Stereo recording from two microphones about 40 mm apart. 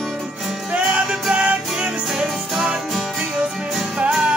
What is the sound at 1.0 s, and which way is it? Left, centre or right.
Music, centre.